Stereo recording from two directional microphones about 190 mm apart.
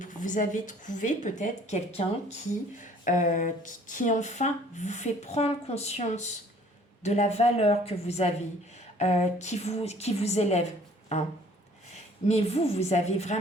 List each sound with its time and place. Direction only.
0.0 s speech: 40° left (ahead or behind)
12.3 s speech: 30° left (ahead or behind)